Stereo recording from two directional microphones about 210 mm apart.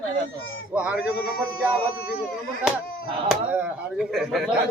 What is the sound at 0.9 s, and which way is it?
Speech, 45° left (ahead or behind).